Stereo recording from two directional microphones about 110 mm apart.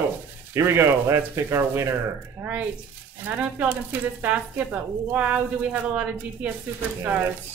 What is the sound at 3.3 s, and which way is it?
Speech, 20° right (ahead or behind).